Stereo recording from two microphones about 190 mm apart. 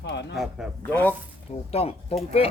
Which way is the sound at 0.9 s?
10° left (ahead or behind).